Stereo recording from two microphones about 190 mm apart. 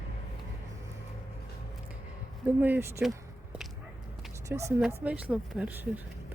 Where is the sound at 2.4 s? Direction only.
10° right (ahead or behind).